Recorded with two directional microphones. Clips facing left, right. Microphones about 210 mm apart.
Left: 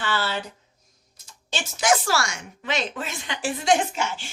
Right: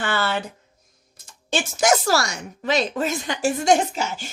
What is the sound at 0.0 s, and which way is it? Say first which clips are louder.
Speech: right 3 dB; 50° right (ahead or behind).